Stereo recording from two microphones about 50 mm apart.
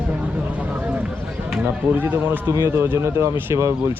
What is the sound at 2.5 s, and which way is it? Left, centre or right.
Speech, right.